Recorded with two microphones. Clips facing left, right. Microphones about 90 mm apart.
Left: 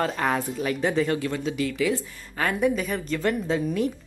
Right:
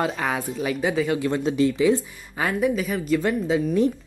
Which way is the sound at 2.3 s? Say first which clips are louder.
Right 1 dB; 5° right (ahead or behind).